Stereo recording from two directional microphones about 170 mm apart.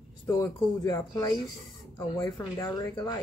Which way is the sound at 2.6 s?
20° left (ahead or behind).